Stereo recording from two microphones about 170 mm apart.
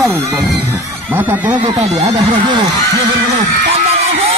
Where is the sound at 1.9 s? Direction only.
20° right (ahead or behind).